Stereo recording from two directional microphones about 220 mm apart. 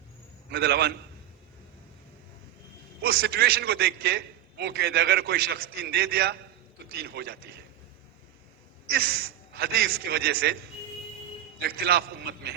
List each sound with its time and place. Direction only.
0.5 s a man's voice: 45° right (ahead or behind)
3.0 s a man's voice: 45° right (ahead or behind)
9.6 s a man's voice: 45° right (ahead or behind)
11.8 s a man's voice: 45° right (ahead or behind)